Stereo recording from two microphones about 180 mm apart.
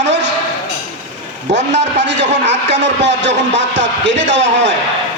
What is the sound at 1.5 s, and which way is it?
Speech, 80° right.